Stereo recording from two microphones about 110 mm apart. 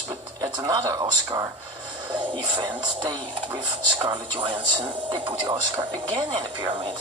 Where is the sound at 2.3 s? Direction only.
50° right (ahead or behind).